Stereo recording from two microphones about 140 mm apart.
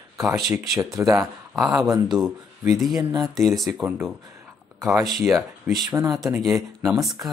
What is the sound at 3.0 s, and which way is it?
Speech, 25° right (ahead or behind).